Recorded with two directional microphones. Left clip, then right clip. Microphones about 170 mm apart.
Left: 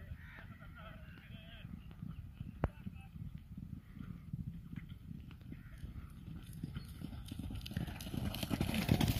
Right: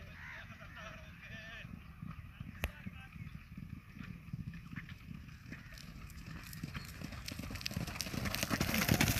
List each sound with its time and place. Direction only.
6.7 s clip-clop: 15° right (ahead or behind)
8.9 s vehicle: 15° left (ahead or behind)